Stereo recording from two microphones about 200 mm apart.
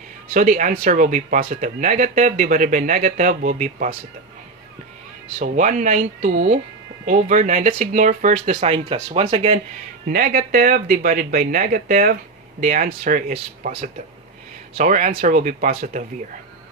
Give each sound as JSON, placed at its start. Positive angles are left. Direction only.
{"t": 0.3, "sound": "speech", "side_deg": -40}
{"t": 5.4, "sound": "speech", "side_deg": -40}
{"t": 10.1, "sound": "speech", "side_deg": -45}